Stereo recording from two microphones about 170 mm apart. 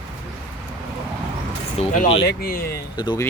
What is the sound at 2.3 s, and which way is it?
Speech, 60° left (ahead or behind).